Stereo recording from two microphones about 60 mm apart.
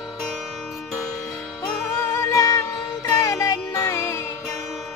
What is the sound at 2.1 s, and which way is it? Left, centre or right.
Music, left.